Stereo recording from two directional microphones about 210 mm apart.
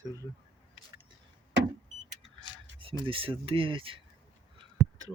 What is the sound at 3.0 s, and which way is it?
Speech, 25° right (ahead or behind).